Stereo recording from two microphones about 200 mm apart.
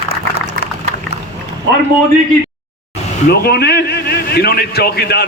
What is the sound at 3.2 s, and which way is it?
A man's voice, 55° left (ahead or behind).